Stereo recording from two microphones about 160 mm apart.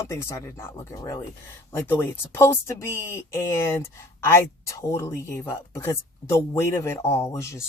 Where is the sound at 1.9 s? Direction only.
15° left (ahead or behind).